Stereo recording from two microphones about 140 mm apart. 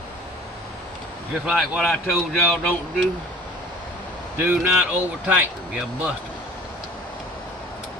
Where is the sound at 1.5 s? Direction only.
5° left (ahead or behind).